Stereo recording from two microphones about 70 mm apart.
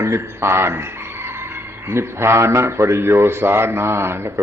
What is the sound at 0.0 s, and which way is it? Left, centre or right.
A man's voice, right.